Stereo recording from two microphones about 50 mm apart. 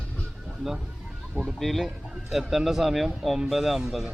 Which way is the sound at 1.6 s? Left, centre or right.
Centre.